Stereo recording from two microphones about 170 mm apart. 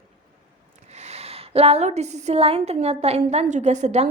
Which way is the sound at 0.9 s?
40° right (ahead or behind).